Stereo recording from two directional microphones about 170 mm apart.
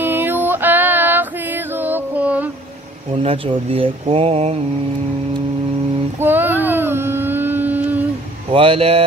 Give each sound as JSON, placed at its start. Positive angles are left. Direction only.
{"t": 0.0, "sound": "female singing", "side_deg": -10}
{"t": 3.2, "sound": "speech", "side_deg": -35}
{"t": 6.1, "sound": "a sound", "side_deg": -10}
{"t": 8.5, "sound": "speech", "side_deg": -35}